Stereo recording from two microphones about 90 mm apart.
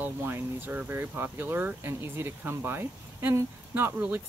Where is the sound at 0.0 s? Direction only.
25° right (ahead or behind).